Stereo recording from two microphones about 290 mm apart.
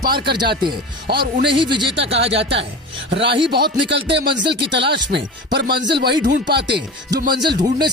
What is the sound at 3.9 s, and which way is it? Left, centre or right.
Speech, right.